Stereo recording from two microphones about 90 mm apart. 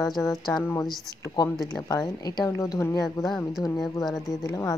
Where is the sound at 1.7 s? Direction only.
45° left (ahead or behind).